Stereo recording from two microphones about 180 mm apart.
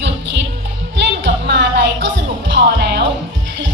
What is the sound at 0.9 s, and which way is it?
Music, 75° right (ahead or behind).